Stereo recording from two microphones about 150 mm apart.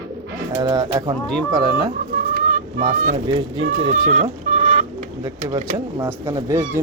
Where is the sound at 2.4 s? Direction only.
55° right (ahead or behind).